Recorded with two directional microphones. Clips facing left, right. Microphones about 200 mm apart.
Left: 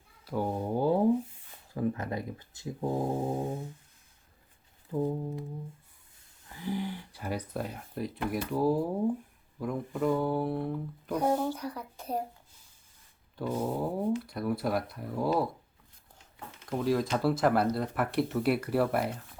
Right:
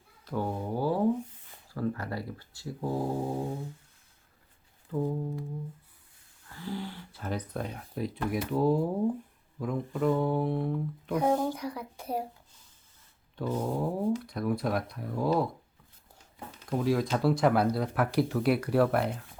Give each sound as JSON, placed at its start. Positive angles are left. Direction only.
{"t": 0.3, "sound": "a sound", "side_deg": 15}
{"t": 1.7, "sound": "speech", "side_deg": 20}
{"t": 4.9, "sound": "speech", "side_deg": 15}
{"t": 6.5, "sound": "speech", "side_deg": 15}
{"t": 11.2, "sound": "speech", "side_deg": -10}
{"t": 13.3, "sound": "speech", "side_deg": 10}
{"t": 16.6, "sound": "speech", "side_deg": 0}